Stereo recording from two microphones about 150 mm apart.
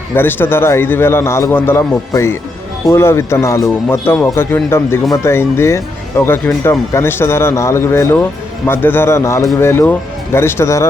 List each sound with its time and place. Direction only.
0.1 s speech: 15° left (ahead or behind)